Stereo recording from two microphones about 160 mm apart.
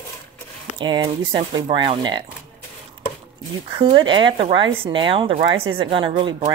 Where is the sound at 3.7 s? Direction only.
30° right (ahead or behind).